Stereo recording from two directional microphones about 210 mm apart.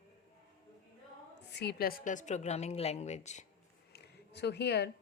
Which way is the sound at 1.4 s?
55° left (ahead or behind).